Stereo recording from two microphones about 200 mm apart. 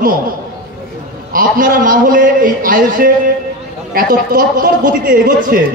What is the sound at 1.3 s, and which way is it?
A man's voice, 45° right (ahead or behind).